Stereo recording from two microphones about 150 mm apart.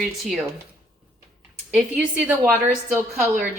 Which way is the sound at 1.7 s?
Centre (ahead or behind).